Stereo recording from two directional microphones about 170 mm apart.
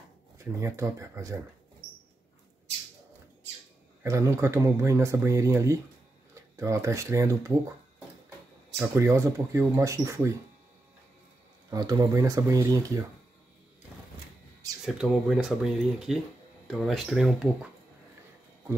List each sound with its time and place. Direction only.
0.4 s speech: 15° right (ahead or behind)
4.0 s speech: 15° right (ahead or behind)
8.7 s speech: 15° right (ahead or behind)
11.7 s speech: 20° right (ahead or behind)
14.9 s speech: 5° right (ahead or behind)